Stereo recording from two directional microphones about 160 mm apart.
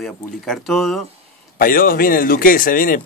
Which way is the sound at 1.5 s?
65° left (ahead or behind).